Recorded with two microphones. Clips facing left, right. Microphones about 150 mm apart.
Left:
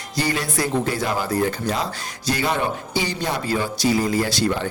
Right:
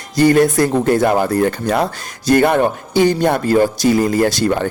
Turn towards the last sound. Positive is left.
turn(degrees=-50)  # may be behind; listen again after turning